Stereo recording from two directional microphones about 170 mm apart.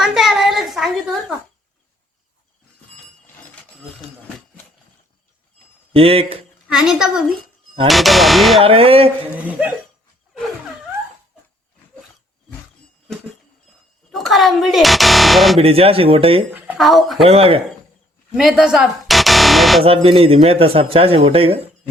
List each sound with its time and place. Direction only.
0.0 s a sound: centre (ahead or behind)
5.9 s speech: 35° right (ahead or behind)
6.7 s speech: 5° right (ahead or behind)
8.6 s speech: 35° right (ahead or behind)
9.3 s speech: 10° right (ahead or behind)
14.1 s speech: centre (ahead or behind)
15.5 s speech: 35° right (ahead or behind)
16.6 s speech: 5° right (ahead or behind)
17.2 s speech: 35° right (ahead or behind)
18.3 s music: 5° right (ahead or behind)
19.8 s speech: 35° right (ahead or behind)